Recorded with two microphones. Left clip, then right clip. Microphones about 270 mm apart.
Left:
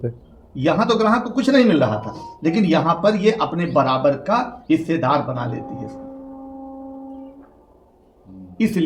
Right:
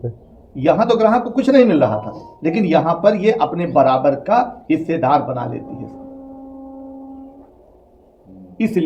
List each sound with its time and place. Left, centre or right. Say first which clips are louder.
0.5 s a man's voice: right 4 dB; centre
8.6 s a man's voice: even; centre